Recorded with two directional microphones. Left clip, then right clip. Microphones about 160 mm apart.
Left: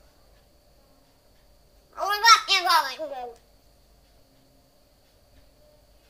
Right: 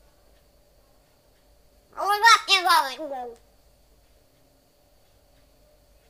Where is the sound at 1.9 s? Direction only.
30° right (ahead or behind).